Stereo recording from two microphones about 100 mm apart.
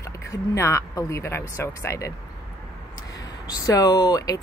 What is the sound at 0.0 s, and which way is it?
Speech, 30° left (ahead or behind).